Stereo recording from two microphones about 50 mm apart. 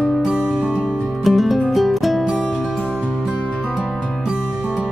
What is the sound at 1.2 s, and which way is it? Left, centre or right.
Music, centre.